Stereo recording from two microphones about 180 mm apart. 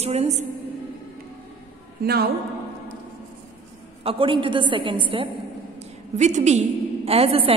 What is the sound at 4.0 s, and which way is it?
A woman's voice, 30° right (ahead or behind).